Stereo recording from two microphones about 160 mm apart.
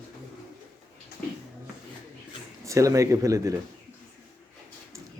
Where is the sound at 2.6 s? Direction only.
20° right (ahead or behind).